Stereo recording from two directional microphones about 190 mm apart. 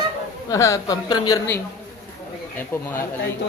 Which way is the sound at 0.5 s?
15° left (ahead or behind).